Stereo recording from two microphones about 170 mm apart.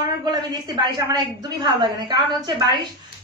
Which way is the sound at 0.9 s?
25° right (ahead or behind).